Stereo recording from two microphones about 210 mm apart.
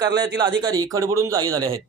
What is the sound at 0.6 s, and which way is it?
A man's voice, 20° right (ahead or behind).